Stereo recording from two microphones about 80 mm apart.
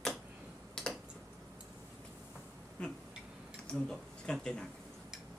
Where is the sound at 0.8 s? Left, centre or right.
Centre.